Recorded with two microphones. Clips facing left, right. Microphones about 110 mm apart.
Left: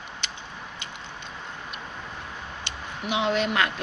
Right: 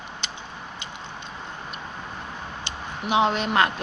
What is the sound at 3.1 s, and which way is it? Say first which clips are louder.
Speech: right 3 dB; 30° right (ahead or behind).